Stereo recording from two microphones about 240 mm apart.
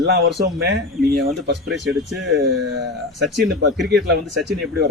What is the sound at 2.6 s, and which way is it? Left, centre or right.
Speech, right.